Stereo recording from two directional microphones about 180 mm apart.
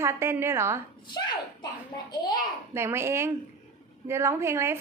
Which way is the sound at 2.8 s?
15° right (ahead or behind).